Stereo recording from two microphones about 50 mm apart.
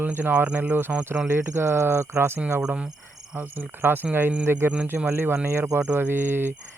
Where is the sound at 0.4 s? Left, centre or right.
Right.